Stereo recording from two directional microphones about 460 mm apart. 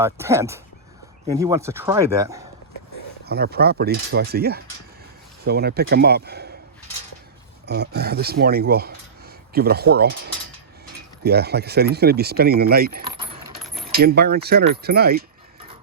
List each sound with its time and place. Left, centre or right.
0.0 s speech: centre
3.2 s speech: right
7.7 s speech: right
11.2 s speech: right